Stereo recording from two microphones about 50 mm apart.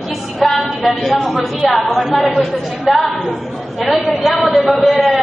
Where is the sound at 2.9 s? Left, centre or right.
Centre.